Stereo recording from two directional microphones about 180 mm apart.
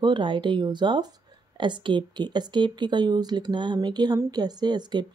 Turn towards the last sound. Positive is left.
turn(degrees=-25)  # may be behind; listen again after turning